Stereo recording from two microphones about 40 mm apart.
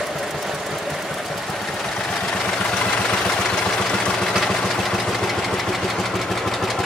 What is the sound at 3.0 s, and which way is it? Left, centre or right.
Vehicle, centre.